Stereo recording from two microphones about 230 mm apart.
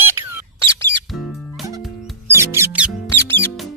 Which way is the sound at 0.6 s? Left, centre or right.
Centre.